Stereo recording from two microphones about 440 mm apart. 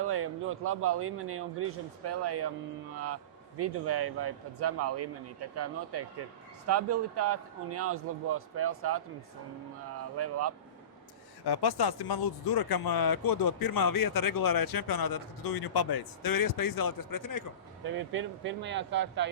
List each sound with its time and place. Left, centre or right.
0.0 s a man's voice: right
3.6 s a man's voice: right
10.2 s speech: right
11.4 s speech: left
17.8 s a man's voice: right